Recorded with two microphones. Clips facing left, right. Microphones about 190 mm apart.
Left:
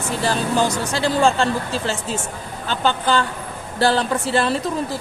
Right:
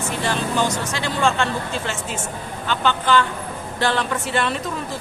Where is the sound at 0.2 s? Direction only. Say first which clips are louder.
Left 3 dB; 35° left (ahead or behind).